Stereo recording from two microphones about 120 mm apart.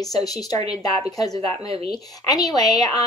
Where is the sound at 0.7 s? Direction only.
30° left (ahead or behind).